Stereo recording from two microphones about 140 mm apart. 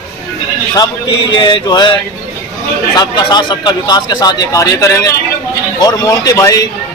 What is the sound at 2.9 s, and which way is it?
A man's voice, 30° left (ahead or behind).